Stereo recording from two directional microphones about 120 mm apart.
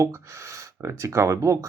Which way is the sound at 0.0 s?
25° right (ahead or behind).